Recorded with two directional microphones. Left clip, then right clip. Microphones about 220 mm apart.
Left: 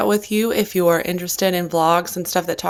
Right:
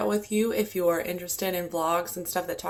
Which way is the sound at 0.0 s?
50° left (ahead or behind).